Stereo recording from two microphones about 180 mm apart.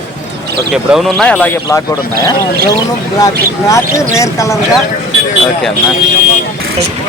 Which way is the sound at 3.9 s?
15° left (ahead or behind).